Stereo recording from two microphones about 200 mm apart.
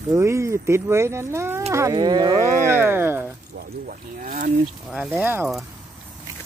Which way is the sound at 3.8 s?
40° right (ahead or behind).